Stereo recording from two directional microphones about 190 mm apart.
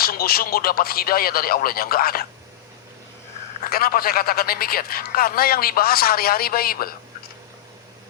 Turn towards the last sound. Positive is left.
turn(degrees=50)  # may be behind; listen again after turning